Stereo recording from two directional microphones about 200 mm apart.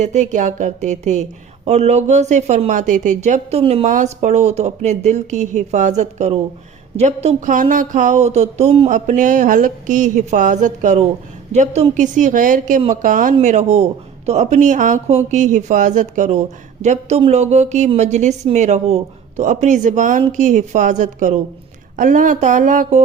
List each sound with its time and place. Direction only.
0.0 s speech: 35° right (ahead or behind)